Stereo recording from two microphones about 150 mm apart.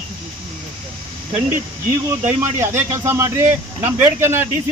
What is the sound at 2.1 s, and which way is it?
Speech, 15° right (ahead or behind).